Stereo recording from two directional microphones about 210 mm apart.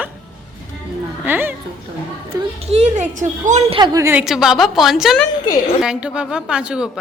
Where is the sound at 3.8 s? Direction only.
15° right (ahead or behind).